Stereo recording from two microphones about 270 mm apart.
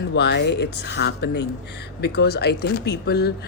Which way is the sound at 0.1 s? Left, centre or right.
Left.